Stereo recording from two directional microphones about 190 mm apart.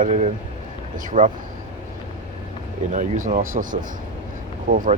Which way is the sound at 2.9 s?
40° right (ahead or behind).